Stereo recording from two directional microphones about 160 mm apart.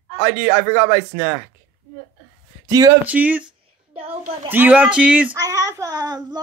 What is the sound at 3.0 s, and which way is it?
Speech, 10° right (ahead or behind).